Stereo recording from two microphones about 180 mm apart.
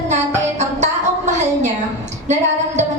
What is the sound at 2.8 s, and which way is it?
Music, 40° right (ahead or behind).